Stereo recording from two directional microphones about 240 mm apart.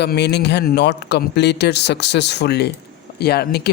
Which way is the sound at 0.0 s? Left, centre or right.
Left.